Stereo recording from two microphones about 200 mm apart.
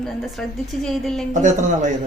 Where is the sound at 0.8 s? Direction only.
Centre (ahead or behind).